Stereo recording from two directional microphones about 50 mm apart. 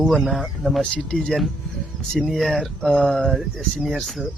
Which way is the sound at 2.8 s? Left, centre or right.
Centre.